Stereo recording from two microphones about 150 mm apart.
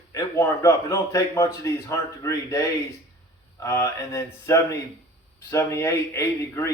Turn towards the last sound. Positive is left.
turn(degrees=20)  # may be behind; listen again after turning